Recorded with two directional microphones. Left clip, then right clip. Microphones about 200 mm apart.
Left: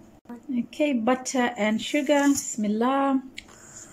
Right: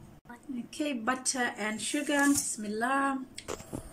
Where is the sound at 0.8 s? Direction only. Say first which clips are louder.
Left 8 dB; 20° left (ahead or behind).